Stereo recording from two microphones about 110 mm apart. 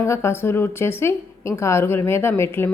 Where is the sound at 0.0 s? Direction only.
25° left (ahead or behind).